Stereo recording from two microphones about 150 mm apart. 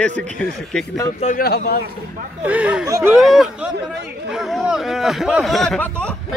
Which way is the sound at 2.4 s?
10° right (ahead or behind).